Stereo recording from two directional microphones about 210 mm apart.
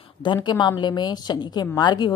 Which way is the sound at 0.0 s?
20° left (ahead or behind).